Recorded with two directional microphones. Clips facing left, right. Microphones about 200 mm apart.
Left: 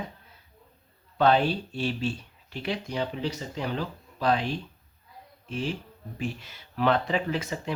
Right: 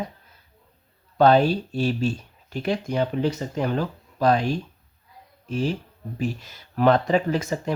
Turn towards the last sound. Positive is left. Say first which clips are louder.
# right 5 dB
turn(degrees=-45)  # may be behind; listen again after turning